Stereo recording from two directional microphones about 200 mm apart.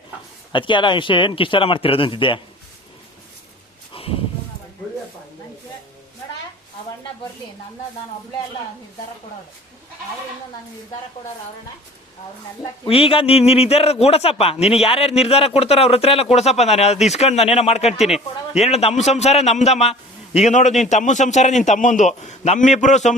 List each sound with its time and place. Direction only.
0.5 s speech: 25° left (ahead or behind)
3.9 s a sound: 25° left (ahead or behind)
12.8 s a man's voice: 30° left (ahead or behind)